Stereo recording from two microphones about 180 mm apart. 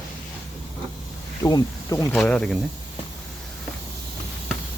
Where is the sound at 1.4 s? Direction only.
20° left (ahead or behind).